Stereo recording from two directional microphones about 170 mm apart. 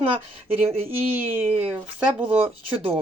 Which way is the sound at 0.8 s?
10° right (ahead or behind).